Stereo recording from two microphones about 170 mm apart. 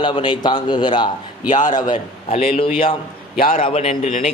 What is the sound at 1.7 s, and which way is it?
Speech, 25° left (ahead or behind).